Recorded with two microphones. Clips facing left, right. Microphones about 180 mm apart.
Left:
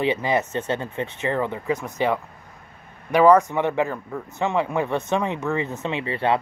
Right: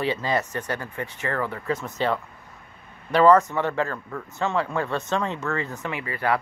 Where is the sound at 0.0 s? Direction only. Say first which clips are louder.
Left 3 dB; 20° left (ahead or behind).